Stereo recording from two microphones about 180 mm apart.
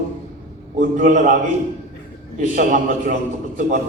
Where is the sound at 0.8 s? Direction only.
45° right (ahead or behind).